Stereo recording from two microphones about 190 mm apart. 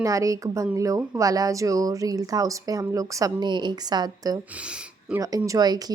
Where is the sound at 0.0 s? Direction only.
15° right (ahead or behind).